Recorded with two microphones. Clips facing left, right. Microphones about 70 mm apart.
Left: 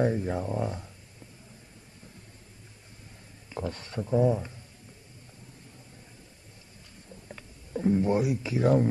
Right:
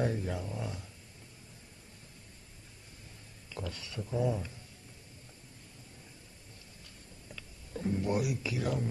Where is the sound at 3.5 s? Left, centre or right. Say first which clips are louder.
Left 7 dB; left.